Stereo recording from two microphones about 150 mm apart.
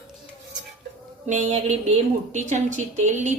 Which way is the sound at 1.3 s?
50° right (ahead or behind).